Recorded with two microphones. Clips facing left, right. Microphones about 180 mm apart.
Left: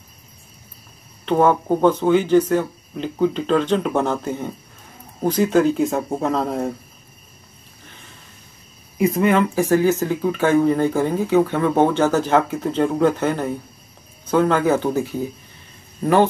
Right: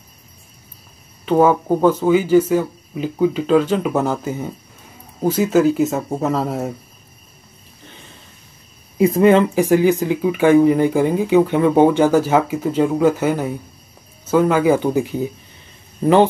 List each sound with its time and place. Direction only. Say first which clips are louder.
1.2 s speech: right 2 dB; 5° right (ahead or behind)
8.9 s speech: right 5 dB; 30° right (ahead or behind)
9.6 s speech: right 2 dB; 15° right (ahead or behind)